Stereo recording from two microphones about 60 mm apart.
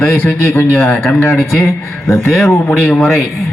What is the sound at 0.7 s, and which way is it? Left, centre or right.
Mantra, centre.